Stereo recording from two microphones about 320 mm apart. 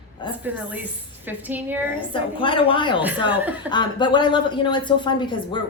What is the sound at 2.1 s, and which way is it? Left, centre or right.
Speech, centre.